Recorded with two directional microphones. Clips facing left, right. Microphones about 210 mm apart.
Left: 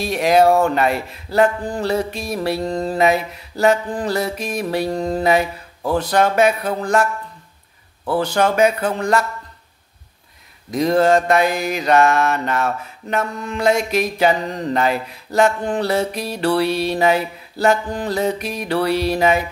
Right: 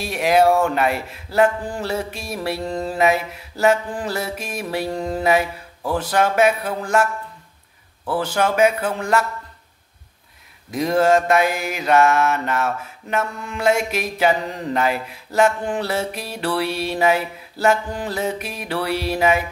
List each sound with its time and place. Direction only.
0.0 s music: 5° right (ahead or behind)
2.1 s a sound: 5° right (ahead or behind)
8.1 s music: 5° right (ahead or behind)
10.7 s music: 5° right (ahead or behind)
13.4 s a sound: 5° right (ahead or behind)
16.1 s music: 5° right (ahead or behind)